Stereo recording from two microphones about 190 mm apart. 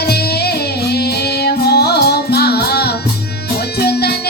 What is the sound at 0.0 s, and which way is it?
Music, 60° left (ahead or behind).